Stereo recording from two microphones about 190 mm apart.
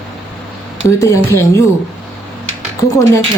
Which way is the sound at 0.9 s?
15° left (ahead or behind).